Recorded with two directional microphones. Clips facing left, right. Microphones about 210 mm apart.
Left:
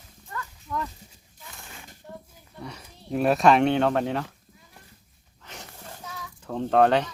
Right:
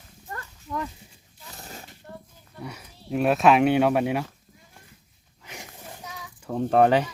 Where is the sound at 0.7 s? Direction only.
15° right (ahead or behind).